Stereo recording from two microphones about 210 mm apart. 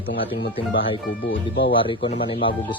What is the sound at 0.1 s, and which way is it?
Speech, 60° left (ahead or behind).